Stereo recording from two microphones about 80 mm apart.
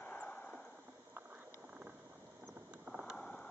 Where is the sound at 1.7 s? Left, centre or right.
Centre.